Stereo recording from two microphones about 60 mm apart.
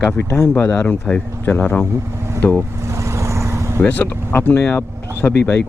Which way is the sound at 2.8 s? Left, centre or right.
Right.